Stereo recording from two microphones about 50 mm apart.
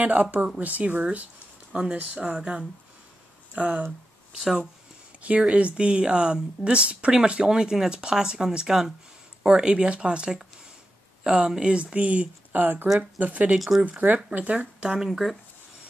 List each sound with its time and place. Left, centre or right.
0.0 s speech: right
1.7 s speech: centre
5.2 s speech: right
11.7 s speech: right
13.6 s speech: centre
13.8 s speech: right
15.0 s speech: centre